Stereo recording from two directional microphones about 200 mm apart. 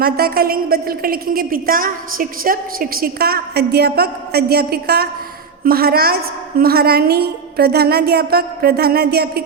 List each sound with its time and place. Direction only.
0.0 s a woman's voice: 50° right (ahead or behind)